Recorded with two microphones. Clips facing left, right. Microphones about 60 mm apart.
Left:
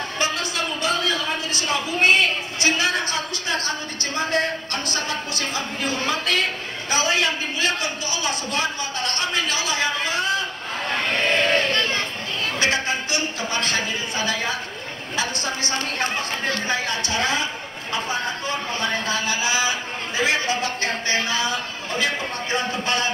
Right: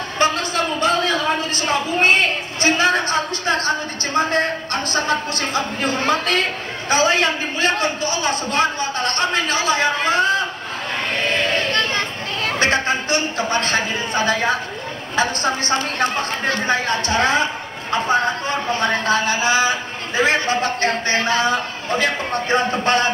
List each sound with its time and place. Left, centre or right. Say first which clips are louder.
0.2 s a sound: right 7 dB; right
6.9 s speech: right 5 dB; right
12.5 s a woman's voice: right 4 dB; right